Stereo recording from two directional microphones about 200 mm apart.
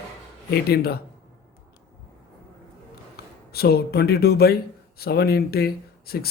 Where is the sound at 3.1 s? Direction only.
50° left (ahead or behind).